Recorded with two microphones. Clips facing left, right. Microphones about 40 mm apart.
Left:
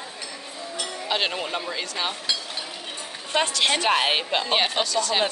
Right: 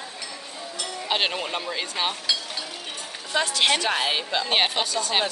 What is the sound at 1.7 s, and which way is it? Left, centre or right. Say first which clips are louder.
Speech: right 1 dB; centre.